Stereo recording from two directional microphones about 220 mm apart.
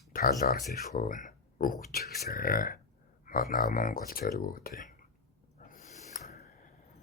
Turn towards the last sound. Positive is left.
turn(degrees=45)  # may be behind; listen again after turning